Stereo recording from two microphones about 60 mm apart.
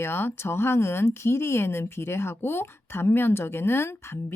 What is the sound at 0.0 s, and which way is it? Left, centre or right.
Speech, left.